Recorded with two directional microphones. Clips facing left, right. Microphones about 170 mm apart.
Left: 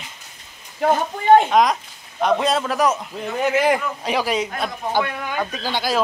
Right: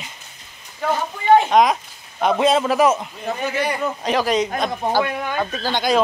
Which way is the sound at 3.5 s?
90° left.